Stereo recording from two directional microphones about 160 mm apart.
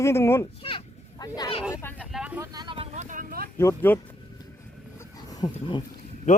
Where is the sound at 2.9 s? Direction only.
50° right (ahead or behind).